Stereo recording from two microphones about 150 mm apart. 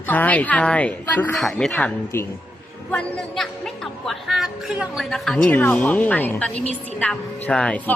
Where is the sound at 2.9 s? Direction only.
5° left (ahead or behind).